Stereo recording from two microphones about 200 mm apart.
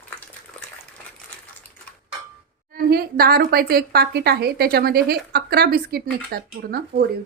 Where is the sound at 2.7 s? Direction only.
50° right (ahead or behind).